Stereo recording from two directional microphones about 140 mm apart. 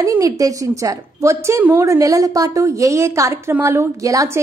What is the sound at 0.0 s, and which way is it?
A woman's voice, 25° right (ahead or behind).